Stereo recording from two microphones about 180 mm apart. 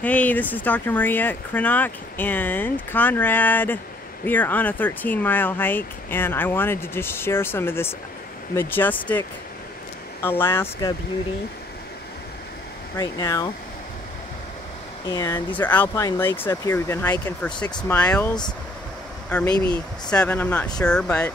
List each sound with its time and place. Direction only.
0.0 s speech: 10° left (ahead or behind)
10.2 s speech: 15° left (ahead or behind)
12.9 s speech: 20° left (ahead or behind)
15.0 s speech: 20° left (ahead or behind)
19.5 s speech: 25° right (ahead or behind)
20.1 s speech: 5° left (ahead or behind)